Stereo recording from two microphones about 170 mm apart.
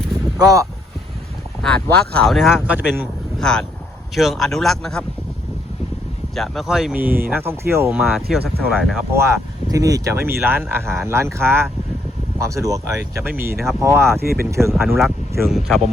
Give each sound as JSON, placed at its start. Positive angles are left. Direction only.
{"t": 0.3, "sound": "speech", "side_deg": -20}
{"t": 1.6, "sound": "speech", "side_deg": 5}
{"t": 3.4, "sound": "speech", "side_deg": 5}
{"t": 6.3, "sound": "speech", "side_deg": 0}
{"t": 8.0, "sound": "speech", "side_deg": 0}
{"t": 9.1, "sound": "speech", "side_deg": -15}
{"t": 14.2, "sound": "speech", "side_deg": -65}
{"t": 14.9, "sound": "speech", "side_deg": 0}